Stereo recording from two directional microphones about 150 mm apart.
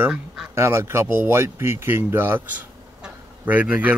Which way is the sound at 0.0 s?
5° right (ahead or behind).